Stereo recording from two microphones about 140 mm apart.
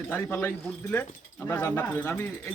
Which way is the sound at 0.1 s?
15° left (ahead or behind).